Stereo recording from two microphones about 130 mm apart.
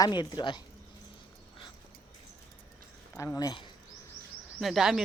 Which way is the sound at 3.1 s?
25° left (ahead or behind).